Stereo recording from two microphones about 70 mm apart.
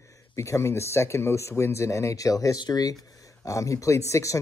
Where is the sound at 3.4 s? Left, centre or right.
Left.